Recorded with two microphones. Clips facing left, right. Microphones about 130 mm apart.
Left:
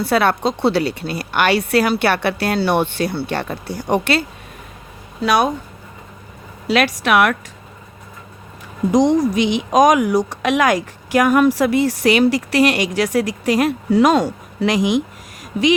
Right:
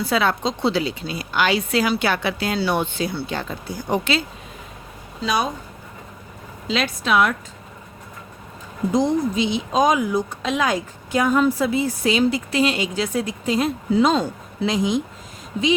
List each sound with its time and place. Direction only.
0.0 s a woman's voice: 60° left (ahead or behind)
6.7 s speech: 70° left (ahead or behind)
8.9 s speech: 90° left